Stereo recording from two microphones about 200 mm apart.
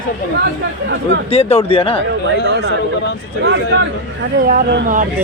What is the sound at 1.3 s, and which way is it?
Speech, 30° left (ahead or behind).